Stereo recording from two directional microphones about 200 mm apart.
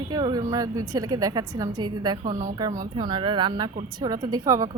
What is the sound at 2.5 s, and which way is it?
Speech, 20° right (ahead or behind).